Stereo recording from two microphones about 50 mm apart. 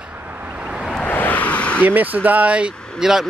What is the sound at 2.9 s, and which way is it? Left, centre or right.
Speech, centre.